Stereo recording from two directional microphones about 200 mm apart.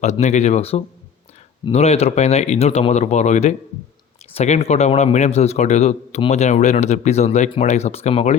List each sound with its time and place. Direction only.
0.0 s a man's voice: 35° left (ahead or behind)